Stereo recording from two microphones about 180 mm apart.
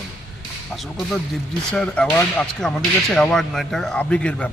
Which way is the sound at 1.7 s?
5° left (ahead or behind).